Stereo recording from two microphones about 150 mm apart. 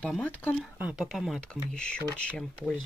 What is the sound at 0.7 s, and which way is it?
Speech, 10° right (ahead or behind).